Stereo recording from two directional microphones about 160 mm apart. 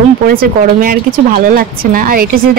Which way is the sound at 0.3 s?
65° right (ahead or behind).